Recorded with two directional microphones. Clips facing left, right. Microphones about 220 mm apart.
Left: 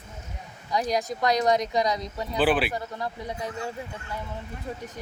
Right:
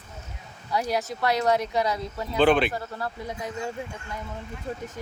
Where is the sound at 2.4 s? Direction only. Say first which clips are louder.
Right 3 dB; 5° left (ahead or behind).